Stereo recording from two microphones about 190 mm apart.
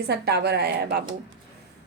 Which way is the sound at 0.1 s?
60° right (ahead or behind).